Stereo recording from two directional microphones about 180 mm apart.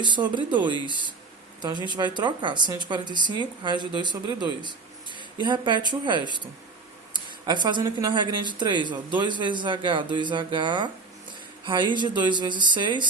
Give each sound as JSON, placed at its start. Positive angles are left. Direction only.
{"t": 0.0, "sound": "speech", "side_deg": -25}
{"t": 1.6, "sound": "speech", "side_deg": -25}
{"t": 7.1, "sound": "a sound", "side_deg": -25}
{"t": 7.9, "sound": "speech", "side_deg": -20}